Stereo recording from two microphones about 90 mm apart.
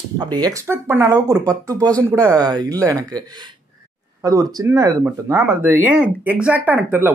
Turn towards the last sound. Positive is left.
turn(degrees=-20)  # may be behind; listen again after turning